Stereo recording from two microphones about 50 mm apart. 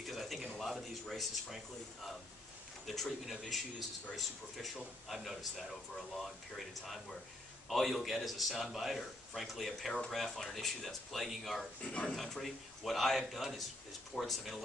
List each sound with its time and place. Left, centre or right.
0.0 s a sound: centre
0.6 s a man's voice: centre
2.9 s a man's voice: centre
5.0 s a man's voice: centre
11.8 s speech: left
12.1 s a man's voice: centre